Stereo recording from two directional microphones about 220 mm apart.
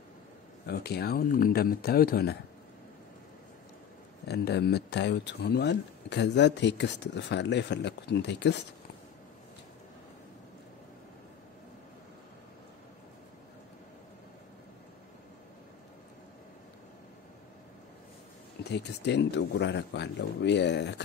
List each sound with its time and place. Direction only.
0.7 s speech: 45° left (ahead or behind)
4.3 s speech: 50° left (ahead or behind)
18.6 s speech: 50° left (ahead or behind)